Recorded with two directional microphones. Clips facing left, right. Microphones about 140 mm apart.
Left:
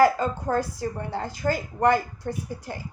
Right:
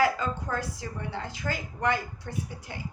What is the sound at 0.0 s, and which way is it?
A woman's voice, 45° left (ahead or behind).